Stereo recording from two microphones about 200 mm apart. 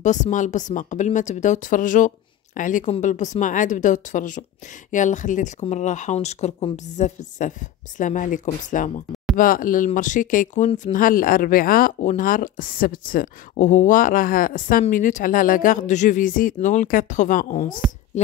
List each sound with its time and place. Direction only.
0.0 s speech: 40° left (ahead or behind)